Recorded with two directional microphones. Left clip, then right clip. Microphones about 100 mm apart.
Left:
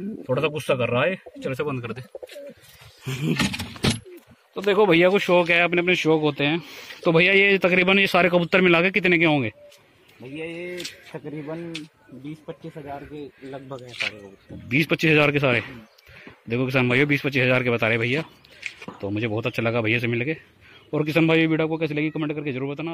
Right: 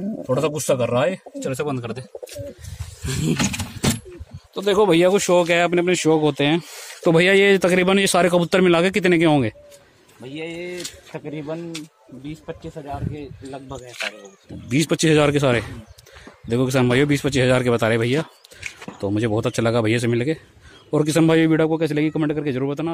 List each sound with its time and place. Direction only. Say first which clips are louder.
0.6 s speech: right 3 dB; centre (ahead or behind)
3.1 s wild animals: right 2 dB; 5° right (ahead or behind)
4.6 s speech: right 1 dB; 20° right (ahead or behind)
5.9 s speech: right 2 dB; 55° right (ahead or behind); by 6.6 s 75° right (ahead or behind)
7.1 s a man's voice: right 2 dB; 90° right
7.7 s speech: right 1 dB; 45° right (ahead or behind)
9.0 s speech: right 2 dB; 65° right (ahead or behind)
10.2 s speech: right 2 dB; 15° right (ahead or behind)
13.5 s speech: right 2 dB; 55° right (ahead or behind)
14.7 s speech: right 1 dB; 40° right (ahead or behind)
18.9 s speech: right 5 dB; 70° right (ahead or behind); by 20.3 s 55° right (ahead or behind)
20.9 s a man's voice: right 3 dB; 65° right (ahead or behind); by 22.8 s 90° right